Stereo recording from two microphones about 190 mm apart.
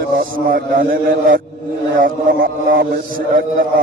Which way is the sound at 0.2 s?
50° right (ahead or behind).